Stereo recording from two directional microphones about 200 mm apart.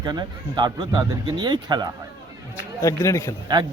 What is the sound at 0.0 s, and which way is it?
Speech, 20° right (ahead or behind).